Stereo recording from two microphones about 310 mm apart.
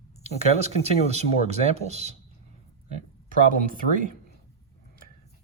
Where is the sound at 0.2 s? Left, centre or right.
Centre.